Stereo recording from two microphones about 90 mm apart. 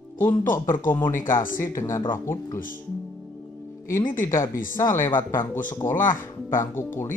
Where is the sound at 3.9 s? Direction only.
30° left (ahead or behind).